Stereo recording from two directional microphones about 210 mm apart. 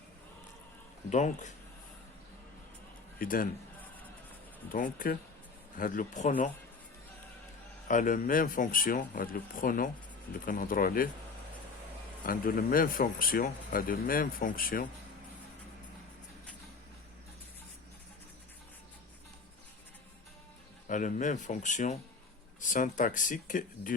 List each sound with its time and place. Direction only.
1.1 s speech: 35° left (ahead or behind)
3.2 s speech: 40° left (ahead or behind)
4.7 s speech: 40° left (ahead or behind)
7.9 s speech: 40° left (ahead or behind)
12.2 s speech: 40° left (ahead or behind)
20.8 s speech: 35° left (ahead or behind)